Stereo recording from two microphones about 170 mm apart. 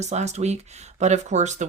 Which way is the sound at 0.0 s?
40° right (ahead or behind).